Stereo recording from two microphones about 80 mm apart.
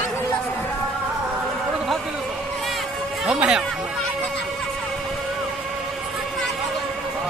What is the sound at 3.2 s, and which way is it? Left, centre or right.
Speech, centre.